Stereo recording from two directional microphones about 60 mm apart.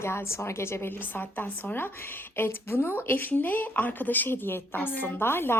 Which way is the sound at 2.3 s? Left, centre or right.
Left.